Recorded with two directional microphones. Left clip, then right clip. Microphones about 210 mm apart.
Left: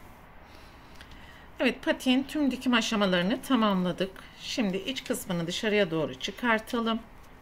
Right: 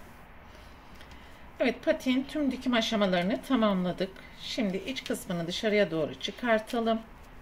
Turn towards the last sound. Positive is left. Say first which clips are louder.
# right 1 dB
turn(degrees=10)  # may be behind; listen again after turning